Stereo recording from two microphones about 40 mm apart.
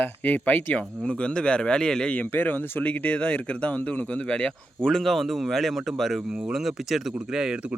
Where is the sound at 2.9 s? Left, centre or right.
Left.